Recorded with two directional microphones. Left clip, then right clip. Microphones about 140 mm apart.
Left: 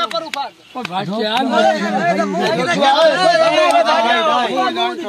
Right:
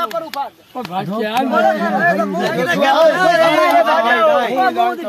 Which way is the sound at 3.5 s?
10° left (ahead or behind).